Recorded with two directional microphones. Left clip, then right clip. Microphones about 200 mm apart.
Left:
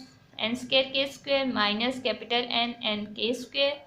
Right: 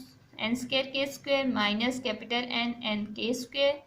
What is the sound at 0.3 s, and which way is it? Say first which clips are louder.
A woman's voice: left 4 dB; 25° right (ahead or behind).